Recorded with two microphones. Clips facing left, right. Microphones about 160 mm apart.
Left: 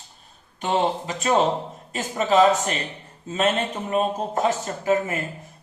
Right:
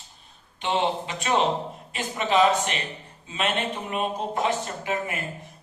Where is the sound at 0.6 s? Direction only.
40° left (ahead or behind).